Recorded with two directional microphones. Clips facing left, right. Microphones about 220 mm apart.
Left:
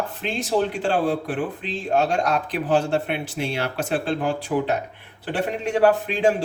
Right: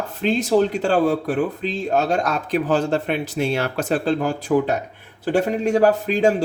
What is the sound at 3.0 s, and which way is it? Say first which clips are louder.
Speech: right 5 dB; 40° right (ahead or behind).